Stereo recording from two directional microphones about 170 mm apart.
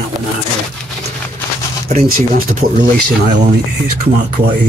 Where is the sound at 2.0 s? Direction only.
55° right (ahead or behind).